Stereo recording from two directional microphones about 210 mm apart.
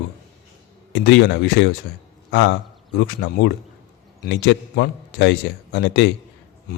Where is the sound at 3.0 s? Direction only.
55° left (ahead or behind).